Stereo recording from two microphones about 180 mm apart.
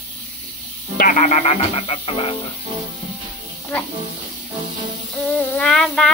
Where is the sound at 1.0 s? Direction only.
45° left (ahead or behind).